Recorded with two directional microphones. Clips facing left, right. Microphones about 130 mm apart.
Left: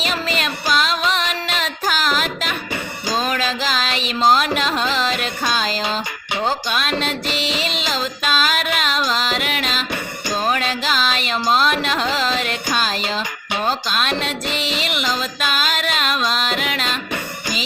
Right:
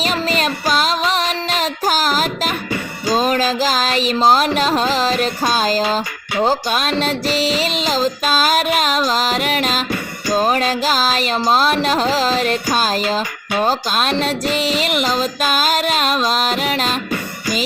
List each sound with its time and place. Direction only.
0.0 s child singing: 40° right (ahead or behind)
3.2 s music: 40° right (ahead or behind)